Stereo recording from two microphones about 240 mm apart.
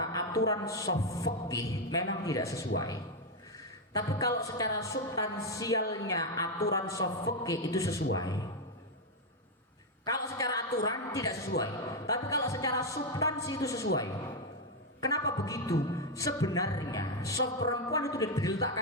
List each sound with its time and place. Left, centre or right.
0.0 s a man's voice: centre
10.0 s a sound: centre
10.8 s a woman's voice: centre
15.0 s a woman's voice: centre